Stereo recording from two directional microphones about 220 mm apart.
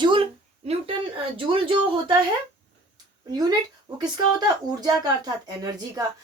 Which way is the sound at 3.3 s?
20° right (ahead or behind).